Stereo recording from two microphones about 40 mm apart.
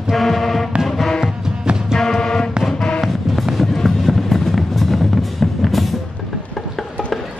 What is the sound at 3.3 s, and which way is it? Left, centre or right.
Music, centre.